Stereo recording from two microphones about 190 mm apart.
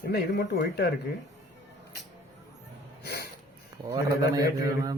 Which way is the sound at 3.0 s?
55° left (ahead or behind).